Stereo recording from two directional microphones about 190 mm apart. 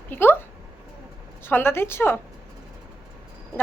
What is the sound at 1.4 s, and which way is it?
Speech, 10° left (ahead or behind).